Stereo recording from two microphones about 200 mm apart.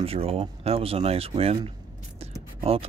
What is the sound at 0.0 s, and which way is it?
Speech, 30° right (ahead or behind).